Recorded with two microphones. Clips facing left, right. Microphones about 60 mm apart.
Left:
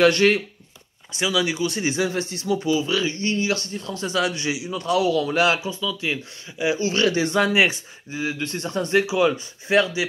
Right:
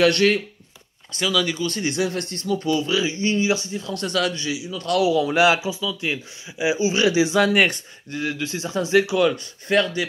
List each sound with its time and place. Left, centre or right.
0.0 s speech: centre
2.9 s speech: centre
3.2 s speech: right
3.8 s speech: centre
4.3 s a man's voice: left
5.1 s speech: centre
7.3 s speech: centre